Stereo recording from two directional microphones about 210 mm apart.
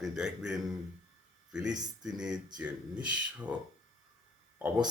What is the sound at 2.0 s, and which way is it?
Speech, 5° right (ahead or behind).